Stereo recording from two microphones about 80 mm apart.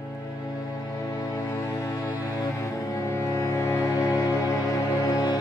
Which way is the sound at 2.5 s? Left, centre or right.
Left.